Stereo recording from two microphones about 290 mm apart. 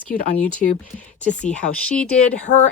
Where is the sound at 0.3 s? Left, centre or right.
Left.